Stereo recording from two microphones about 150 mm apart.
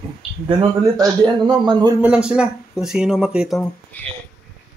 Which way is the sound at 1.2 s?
30° right (ahead or behind).